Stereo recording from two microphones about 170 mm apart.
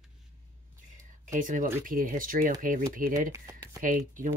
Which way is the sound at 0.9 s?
50° right (ahead or behind).